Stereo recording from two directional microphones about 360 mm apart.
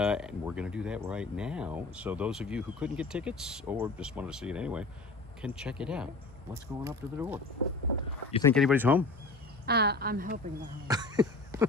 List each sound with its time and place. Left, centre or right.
0.0 s speech: centre
8.3 s speech: centre
9.6 s a woman's voice: right
10.8 s cough: centre